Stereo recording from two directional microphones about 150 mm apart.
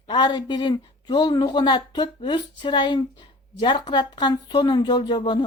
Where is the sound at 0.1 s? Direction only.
30° left (ahead or behind).